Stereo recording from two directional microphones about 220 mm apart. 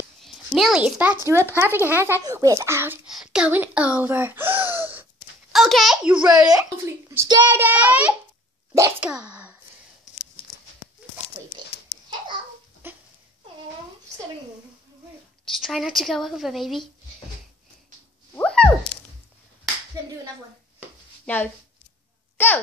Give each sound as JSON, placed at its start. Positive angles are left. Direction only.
{"t": 0.2, "sound": "a child's voice", "side_deg": 0}
{"t": 7.2, "sound": "a child's voice", "side_deg": -15}
{"t": 11.9, "sound": "babbling", "side_deg": -20}
{"t": 12.8, "sound": "a sound", "side_deg": -10}
{"t": 15.4, "sound": "speech", "side_deg": 0}
{"t": 18.3, "sound": "a sound", "side_deg": 5}
{"t": 21.3, "sound": "speech", "side_deg": 5}